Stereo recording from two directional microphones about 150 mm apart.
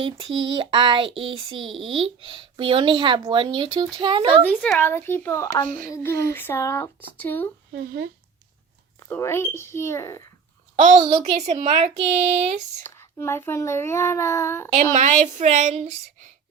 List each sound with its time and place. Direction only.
0.0 s a sound: 35° right (ahead or behind)
4.4 s a child's voice: 10° left (ahead or behind)
7.7 s speech: 90° right
9.0 s a child's voice: 15° left (ahead or behind)
10.8 s a child's voice: 55° right (ahead or behind)
12.8 s a child's voice: 15° left (ahead or behind)
14.8 s speech: 50° right (ahead or behind)